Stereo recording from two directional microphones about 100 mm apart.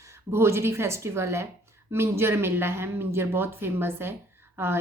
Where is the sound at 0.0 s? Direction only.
30° right (ahead or behind).